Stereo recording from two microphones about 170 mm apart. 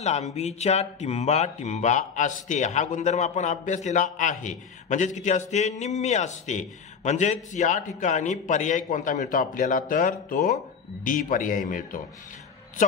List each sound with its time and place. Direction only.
0.0 s speech: 40° left (ahead or behind)